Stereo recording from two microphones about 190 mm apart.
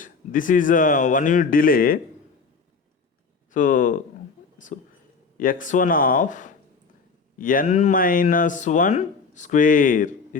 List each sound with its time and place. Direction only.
0.0 s speech: 45° left (ahead or behind)
3.5 s speech: 45° left (ahead or behind)
4.6 s a sound: 40° left (ahead or behind)
5.4 s speech: 45° left (ahead or behind)